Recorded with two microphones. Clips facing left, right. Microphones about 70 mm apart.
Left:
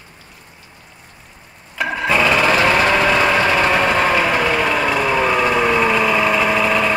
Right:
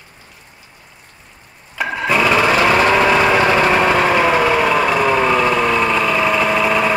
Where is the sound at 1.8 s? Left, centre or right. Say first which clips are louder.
Even; centre.